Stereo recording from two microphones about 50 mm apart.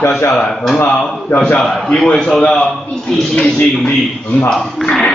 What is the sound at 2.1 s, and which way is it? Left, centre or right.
Speech, centre.